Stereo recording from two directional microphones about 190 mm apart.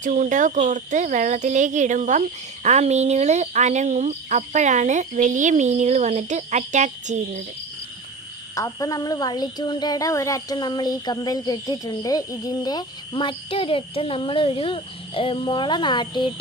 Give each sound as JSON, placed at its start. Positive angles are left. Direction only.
{"t": 0.0, "sound": "speech", "side_deg": -40}
{"t": 8.5, "sound": "speech", "side_deg": 15}